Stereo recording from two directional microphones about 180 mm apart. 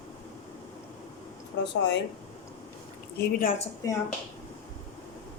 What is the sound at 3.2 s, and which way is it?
Speech, 50° left (ahead or behind).